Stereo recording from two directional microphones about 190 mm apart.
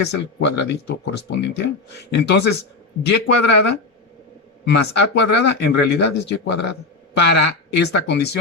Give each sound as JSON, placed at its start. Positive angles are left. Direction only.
{"t": 0.3, "sound": "speech", "side_deg": 65}